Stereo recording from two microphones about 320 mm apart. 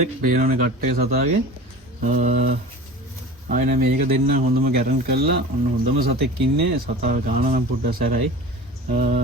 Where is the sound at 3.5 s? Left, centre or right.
Right.